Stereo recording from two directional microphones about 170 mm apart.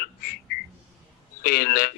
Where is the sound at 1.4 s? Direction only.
65° left (ahead or behind).